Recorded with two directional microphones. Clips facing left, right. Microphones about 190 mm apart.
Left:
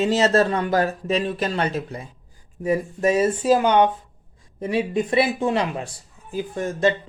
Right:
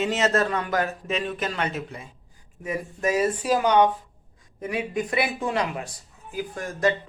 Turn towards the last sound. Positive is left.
turn(degrees=25)  # may be behind; listen again after turning